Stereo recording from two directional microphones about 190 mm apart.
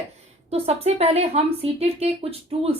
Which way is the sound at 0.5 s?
30° right (ahead or behind).